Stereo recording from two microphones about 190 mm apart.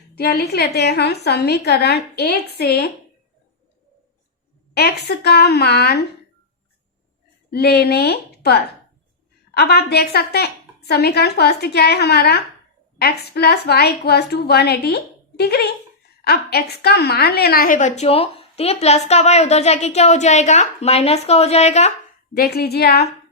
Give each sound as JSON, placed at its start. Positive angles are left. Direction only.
{"t": 0.2, "sound": "a woman's voice", "side_deg": 55}
{"t": 4.7, "sound": "a woman's voice", "side_deg": 55}
{"t": 7.5, "sound": "a woman's voice", "side_deg": 55}
{"t": 22.4, "sound": "a woman's voice", "side_deg": 55}